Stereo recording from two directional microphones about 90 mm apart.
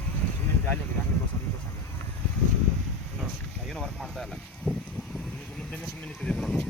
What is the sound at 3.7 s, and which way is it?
Speech, 5° left (ahead or behind).